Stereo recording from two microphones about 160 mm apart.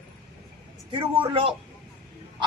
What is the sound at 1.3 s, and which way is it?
Speech, 35° right (ahead or behind).